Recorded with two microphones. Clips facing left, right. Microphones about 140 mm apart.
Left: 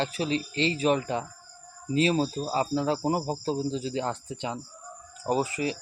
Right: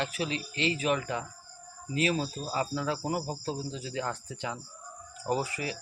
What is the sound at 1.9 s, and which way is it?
Cricket, 30° left (ahead or behind).